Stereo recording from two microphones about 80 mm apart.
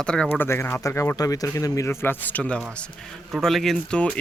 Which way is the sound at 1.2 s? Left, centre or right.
Left.